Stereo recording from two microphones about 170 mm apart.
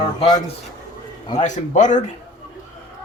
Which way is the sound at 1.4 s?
45° left (ahead or behind).